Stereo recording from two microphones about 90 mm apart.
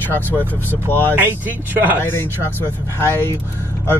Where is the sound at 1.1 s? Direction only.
20° right (ahead or behind).